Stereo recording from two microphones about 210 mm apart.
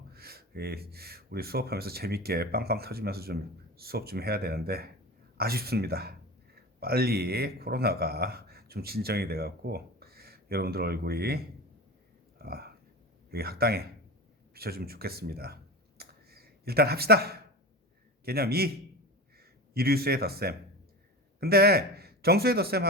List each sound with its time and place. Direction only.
0.1 s speech: 45° right (ahead or behind)
12.4 s a sound: 45° right (ahead or behind)
13.3 s speech: 45° right (ahead or behind)